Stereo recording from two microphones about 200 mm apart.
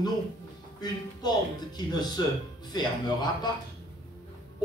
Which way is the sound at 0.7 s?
20° left (ahead or behind).